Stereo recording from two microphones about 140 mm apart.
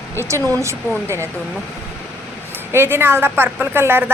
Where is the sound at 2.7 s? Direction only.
15° right (ahead or behind).